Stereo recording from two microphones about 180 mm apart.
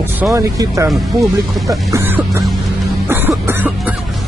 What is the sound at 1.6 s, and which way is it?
Music, 15° right (ahead or behind).